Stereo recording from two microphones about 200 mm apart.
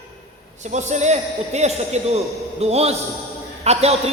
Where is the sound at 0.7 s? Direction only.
35° right (ahead or behind).